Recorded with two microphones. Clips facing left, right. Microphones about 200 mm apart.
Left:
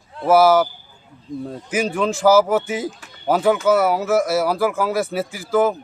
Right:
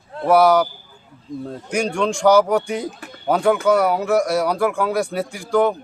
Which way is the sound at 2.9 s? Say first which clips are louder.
Even; 60° right (ahead or behind).